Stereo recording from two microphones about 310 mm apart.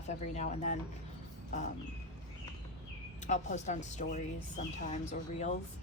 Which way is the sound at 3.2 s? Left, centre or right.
Left.